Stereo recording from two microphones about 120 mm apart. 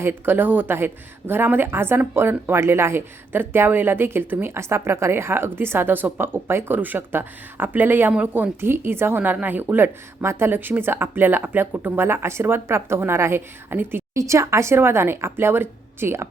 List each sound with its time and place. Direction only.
0.0 s speech: 15° right (ahead or behind)